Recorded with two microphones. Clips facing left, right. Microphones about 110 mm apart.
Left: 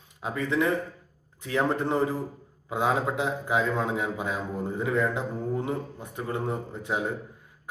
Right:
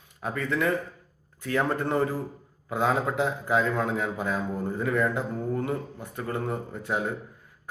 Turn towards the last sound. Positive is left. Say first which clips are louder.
# even
turn(degrees=15)  # may be behind; listen again after turning